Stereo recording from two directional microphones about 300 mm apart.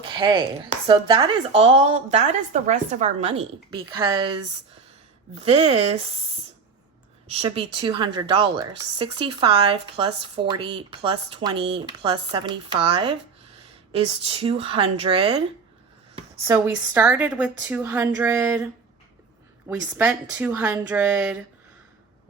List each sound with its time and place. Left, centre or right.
0.0 s speech: centre
5.3 s speech: centre
7.3 s speech: centre